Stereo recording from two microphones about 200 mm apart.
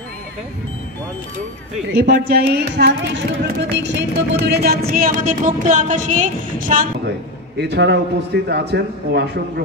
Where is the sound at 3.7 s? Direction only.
60° right (ahead or behind); by 6.2 s 40° right (ahead or behind).